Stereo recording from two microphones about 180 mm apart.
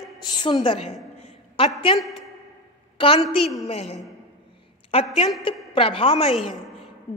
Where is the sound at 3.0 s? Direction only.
30° left (ahead or behind).